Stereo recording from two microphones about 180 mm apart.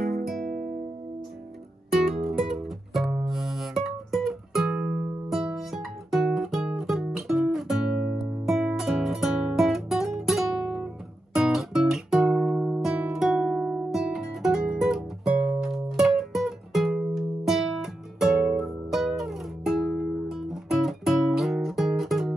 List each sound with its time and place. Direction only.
0.5 s music: 55° right (ahead or behind)
2.2 s music: centre (ahead or behind)
11.3 s guitar: centre (ahead or behind)
18.6 s music: centre (ahead or behind)